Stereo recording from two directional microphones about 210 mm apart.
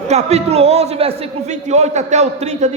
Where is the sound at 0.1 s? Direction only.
30° right (ahead or behind).